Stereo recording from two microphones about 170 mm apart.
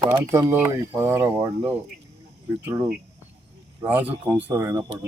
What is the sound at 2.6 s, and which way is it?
Speech, 15° right (ahead or behind).